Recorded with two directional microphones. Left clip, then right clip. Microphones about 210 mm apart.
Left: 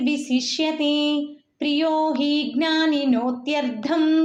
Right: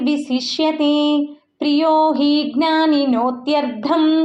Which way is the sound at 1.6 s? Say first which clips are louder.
Right 6 dB; centre (ahead or behind).